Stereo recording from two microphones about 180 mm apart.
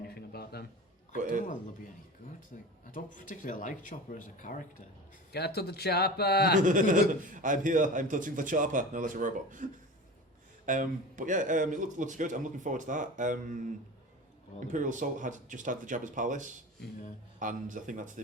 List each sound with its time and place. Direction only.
0.1 s a sound: 60° left (ahead or behind)
2.2 s speech: 45° left (ahead or behind)
5.3 s speech: 65° left (ahead or behind)
6.6 s a man's voice: 45° right (ahead or behind)
10.7 s a man's voice: 45° right (ahead or behind)